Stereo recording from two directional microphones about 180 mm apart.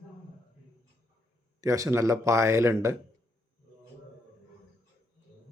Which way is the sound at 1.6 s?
20° right (ahead or behind).